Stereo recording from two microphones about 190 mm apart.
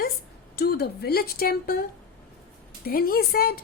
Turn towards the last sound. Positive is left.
turn(degrees=50)  # may be behind; listen again after turning